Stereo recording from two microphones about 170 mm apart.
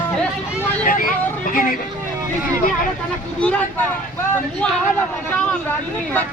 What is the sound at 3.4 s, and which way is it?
Speech, 5° left (ahead or behind).